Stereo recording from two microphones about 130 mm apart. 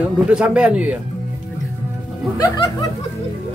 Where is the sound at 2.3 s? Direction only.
30° left (ahead or behind).